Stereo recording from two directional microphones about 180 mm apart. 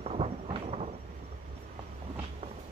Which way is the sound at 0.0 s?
35° right (ahead or behind).